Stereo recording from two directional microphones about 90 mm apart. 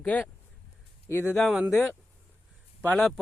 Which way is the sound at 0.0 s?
15° left (ahead or behind).